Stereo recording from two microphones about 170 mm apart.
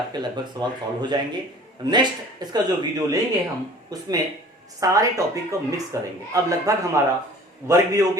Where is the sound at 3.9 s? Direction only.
20° right (ahead or behind).